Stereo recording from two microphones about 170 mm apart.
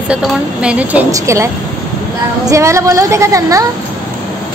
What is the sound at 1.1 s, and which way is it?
A woman's voice, 15° right (ahead or behind).